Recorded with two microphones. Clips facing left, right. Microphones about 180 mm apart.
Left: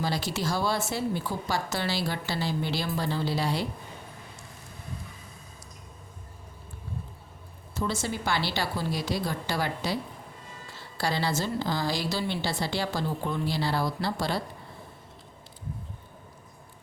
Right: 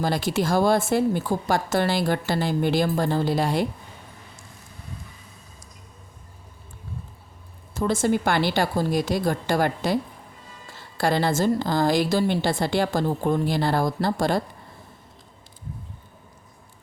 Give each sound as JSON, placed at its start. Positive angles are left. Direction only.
{"t": 0.0, "sound": "speech", "side_deg": -50}
{"t": 7.7, "sound": "speech", "side_deg": -50}